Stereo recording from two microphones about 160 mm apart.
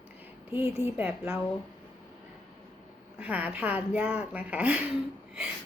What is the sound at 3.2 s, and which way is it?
Speech, 10° right (ahead or behind).